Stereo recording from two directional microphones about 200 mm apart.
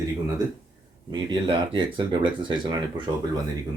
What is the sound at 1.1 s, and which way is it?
Speech, 25° right (ahead or behind).